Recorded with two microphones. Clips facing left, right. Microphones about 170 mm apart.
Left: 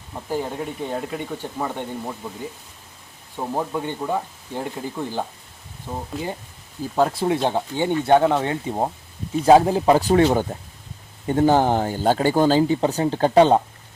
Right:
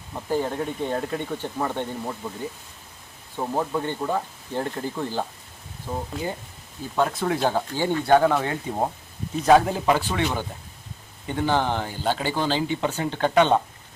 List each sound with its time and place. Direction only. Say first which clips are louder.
0.1 s speech: right 1 dB; 5° left (ahead or behind)
3.3 s speech: even; 10° left (ahead or behind)
6.9 s speech: left 3 dB; 35° left (ahead or behind)